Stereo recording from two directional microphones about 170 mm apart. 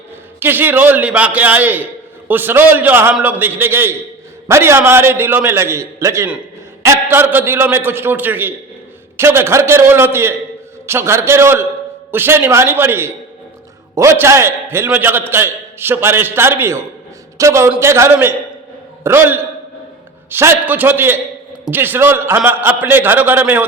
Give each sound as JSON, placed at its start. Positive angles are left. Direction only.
{"t": 0.3, "sound": "a man's voice", "side_deg": -10}